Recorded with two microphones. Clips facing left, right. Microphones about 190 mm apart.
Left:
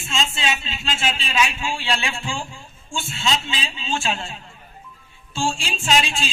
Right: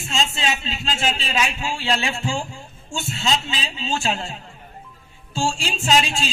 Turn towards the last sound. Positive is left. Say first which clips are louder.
# right 2 dB
turn(degrees=-40)  # may be behind; listen again after turning